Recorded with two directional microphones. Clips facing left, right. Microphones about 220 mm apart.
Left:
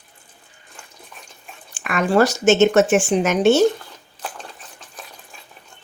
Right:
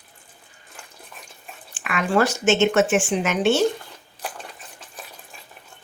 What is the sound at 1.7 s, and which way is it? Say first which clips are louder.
Speech: left 4 dB; 45° left (ahead or behind).